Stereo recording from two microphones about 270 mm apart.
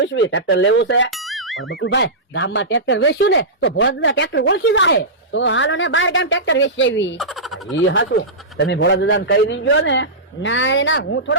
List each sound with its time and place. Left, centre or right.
0.0 s speech: left
1.3 s music: centre
1.8 s speech: left